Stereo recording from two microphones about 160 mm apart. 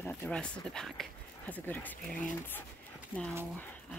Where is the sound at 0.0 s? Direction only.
10° left (ahead or behind).